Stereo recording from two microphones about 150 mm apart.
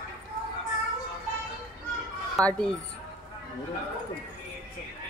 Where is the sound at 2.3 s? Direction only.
5° left (ahead or behind).